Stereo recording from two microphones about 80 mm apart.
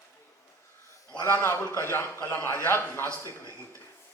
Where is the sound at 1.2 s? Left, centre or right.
Left.